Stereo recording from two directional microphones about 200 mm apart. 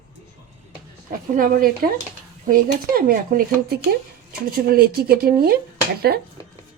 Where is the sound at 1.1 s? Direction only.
45° right (ahead or behind).